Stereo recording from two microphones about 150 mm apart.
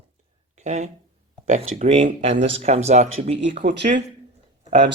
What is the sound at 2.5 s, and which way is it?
Speech, 45° right (ahead or behind).